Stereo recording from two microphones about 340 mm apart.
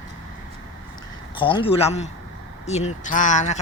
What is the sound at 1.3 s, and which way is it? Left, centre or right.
Speech, centre.